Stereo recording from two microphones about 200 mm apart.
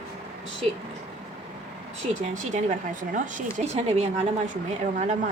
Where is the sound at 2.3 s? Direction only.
35° right (ahead or behind).